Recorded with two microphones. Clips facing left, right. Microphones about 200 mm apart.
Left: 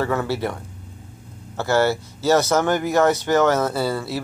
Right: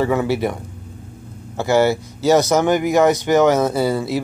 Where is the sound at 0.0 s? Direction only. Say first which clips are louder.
Right 4 dB; 15° right (ahead or behind).